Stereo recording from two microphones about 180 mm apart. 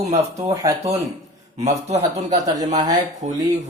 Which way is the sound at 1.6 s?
35° right (ahead or behind).